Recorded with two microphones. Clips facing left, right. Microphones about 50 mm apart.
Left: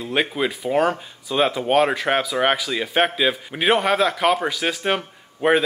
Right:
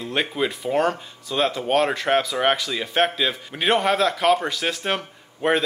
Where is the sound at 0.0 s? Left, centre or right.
Centre.